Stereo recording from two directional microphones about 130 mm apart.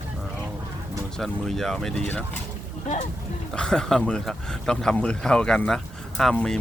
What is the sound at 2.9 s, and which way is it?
Speech, 65° left (ahead or behind).